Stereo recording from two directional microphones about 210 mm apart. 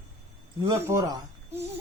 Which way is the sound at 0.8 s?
15° right (ahead or behind).